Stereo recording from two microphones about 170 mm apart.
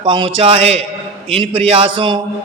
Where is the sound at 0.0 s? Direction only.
30° right (ahead or behind).